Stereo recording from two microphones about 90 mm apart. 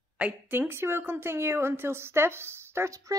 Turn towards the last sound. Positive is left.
turn(degrees=-35)  # may be behind; listen again after turning